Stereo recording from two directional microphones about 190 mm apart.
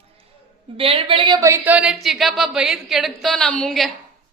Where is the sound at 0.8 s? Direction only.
30° right (ahead or behind).